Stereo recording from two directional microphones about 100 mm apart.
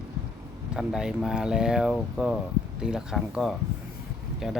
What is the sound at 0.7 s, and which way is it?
Speech, 5° right (ahead or behind).